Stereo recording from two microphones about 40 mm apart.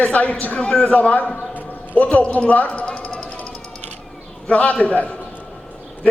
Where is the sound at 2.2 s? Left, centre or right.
Left.